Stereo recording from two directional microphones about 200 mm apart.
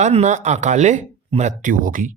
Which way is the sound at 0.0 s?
35° right (ahead or behind).